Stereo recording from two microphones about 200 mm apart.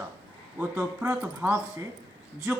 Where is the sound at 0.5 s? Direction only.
10° right (ahead or behind).